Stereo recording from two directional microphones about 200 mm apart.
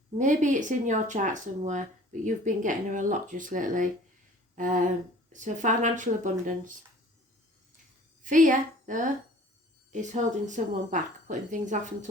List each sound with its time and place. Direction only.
0.2 s a woman's voice: 40° right (ahead or behind)
8.2 s a woman's voice: 40° right (ahead or behind)